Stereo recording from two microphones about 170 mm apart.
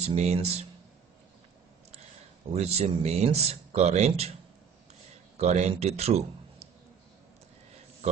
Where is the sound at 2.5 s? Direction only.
40° right (ahead or behind).